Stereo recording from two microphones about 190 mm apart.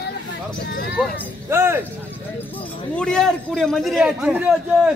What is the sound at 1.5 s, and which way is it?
Speech, 10° right (ahead or behind).